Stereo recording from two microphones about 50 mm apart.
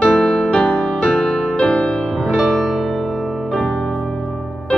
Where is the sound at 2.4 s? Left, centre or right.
Centre.